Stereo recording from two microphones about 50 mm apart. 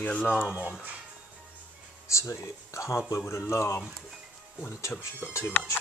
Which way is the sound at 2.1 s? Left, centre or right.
Left.